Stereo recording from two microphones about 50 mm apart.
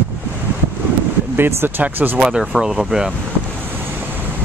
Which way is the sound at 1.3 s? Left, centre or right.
Right.